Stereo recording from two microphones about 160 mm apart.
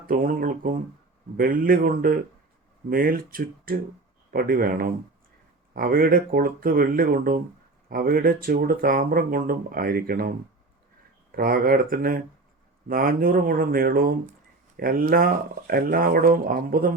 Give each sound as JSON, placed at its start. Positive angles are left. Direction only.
{"t": 0.1, "sound": "speech", "side_deg": -65}